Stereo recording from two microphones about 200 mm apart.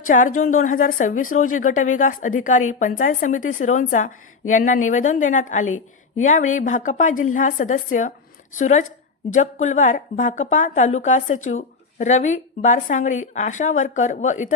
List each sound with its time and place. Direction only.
0.1 s a woman's voice: 40° left (ahead or behind)